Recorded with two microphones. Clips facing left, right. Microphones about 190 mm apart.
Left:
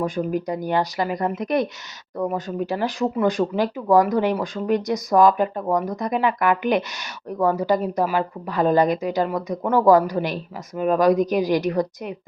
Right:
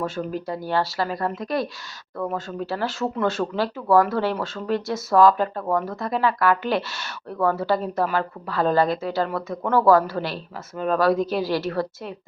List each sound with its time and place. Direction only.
0.0 s speech: 10° left (ahead or behind)